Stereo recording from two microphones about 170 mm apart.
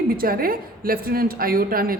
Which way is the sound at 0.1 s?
60° right (ahead or behind).